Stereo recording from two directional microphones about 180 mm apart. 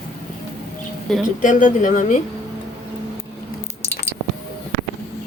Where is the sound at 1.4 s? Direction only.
45° left (ahead or behind).